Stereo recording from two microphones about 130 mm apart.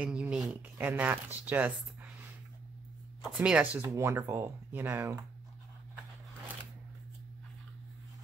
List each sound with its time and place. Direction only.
0.0 s speech: 5° right (ahead or behind)
3.3 s speech: 5° right (ahead or behind)
3.9 s speech: 25° right (ahead or behind)